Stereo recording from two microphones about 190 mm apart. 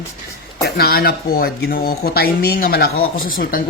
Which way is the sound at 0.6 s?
55° left (ahead or behind).